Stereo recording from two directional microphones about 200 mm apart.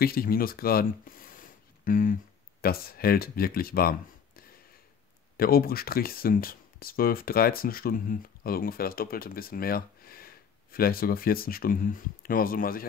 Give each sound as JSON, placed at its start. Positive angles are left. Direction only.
{"t": 0.0, "sound": "speech", "side_deg": 50}
{"t": 5.4, "sound": "speech", "side_deg": 50}